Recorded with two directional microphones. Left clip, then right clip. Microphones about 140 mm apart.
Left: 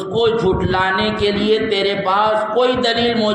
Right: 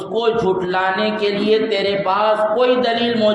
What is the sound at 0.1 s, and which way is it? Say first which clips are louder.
A man's voice: left 1 dB; 35° left (ahead or behind).